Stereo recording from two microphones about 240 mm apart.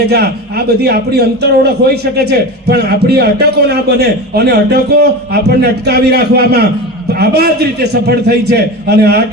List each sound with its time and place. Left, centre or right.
0.0 s a man's voice: right